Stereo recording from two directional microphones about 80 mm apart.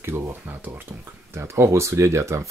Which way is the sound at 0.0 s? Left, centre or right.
Right.